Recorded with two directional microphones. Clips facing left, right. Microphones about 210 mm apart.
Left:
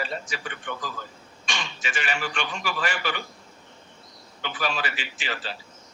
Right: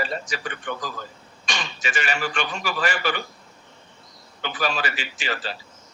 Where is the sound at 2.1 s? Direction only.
40° right (ahead or behind).